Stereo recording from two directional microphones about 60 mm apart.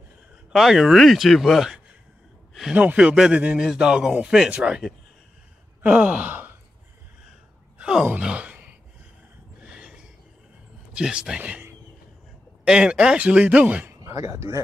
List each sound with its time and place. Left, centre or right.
0.5 s speech: centre
2.7 s speech: right
5.8 s sigh: right
7.8 s speech: centre
8.2 s sigh: centre
9.6 s a sound: centre
11.0 s speech: centre
12.6 s speech: centre
14.0 s speech: right